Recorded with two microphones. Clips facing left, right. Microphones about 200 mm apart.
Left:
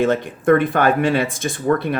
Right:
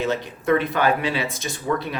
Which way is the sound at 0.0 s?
50° left (ahead or behind).